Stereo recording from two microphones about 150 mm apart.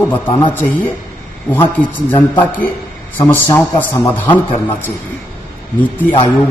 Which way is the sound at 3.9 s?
15° left (ahead or behind).